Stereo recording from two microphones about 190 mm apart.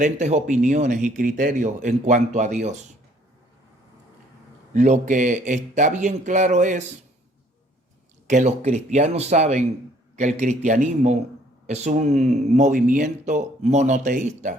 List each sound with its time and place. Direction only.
0.0 s speech: 35° right (ahead or behind)
4.7 s speech: 40° right (ahead or behind)
8.3 s speech: 40° right (ahead or behind)